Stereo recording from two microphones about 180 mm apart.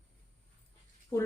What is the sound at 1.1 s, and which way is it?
Speech, 20° left (ahead or behind).